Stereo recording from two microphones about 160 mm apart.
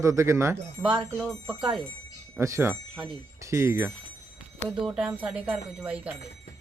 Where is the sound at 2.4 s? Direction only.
20° right (ahead or behind).